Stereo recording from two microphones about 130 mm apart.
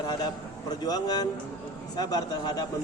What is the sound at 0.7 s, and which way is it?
A man's voice, 30° left (ahead or behind).